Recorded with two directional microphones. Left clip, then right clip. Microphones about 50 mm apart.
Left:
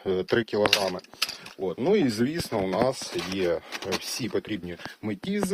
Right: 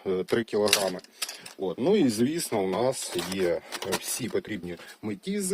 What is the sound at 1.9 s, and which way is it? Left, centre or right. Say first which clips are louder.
Speech: even; right.